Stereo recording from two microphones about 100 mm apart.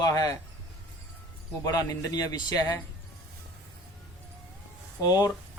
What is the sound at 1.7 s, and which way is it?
Speech, 40° left (ahead or behind).